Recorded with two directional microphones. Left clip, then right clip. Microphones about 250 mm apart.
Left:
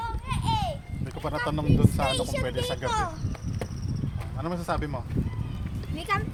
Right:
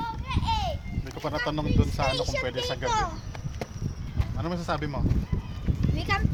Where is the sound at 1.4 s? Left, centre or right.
Centre.